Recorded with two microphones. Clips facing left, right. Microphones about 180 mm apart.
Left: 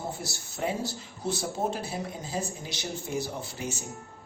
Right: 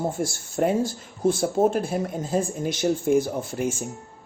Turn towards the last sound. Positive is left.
turn(degrees=-50)  # may be behind; listen again after turning